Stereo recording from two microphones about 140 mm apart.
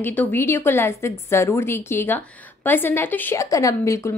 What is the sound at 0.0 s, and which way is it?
A woman's voice, 15° left (ahead or behind).